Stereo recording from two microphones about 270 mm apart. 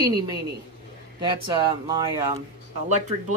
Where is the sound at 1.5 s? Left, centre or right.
Centre.